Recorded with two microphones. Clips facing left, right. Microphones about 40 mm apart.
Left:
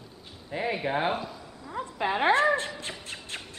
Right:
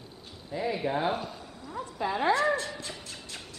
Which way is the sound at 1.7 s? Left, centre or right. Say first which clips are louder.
Left 3 dB; left.